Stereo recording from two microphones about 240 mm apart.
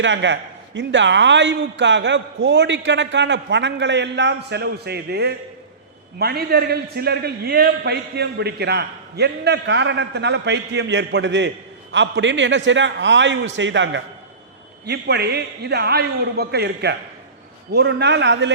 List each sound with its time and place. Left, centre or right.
0.0 s a man's voice: right